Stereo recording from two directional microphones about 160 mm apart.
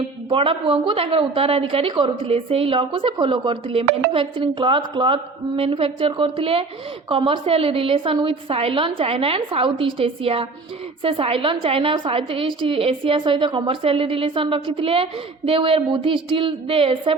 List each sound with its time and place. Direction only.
0.3 s a woman's voice: 35° right (ahead or behind)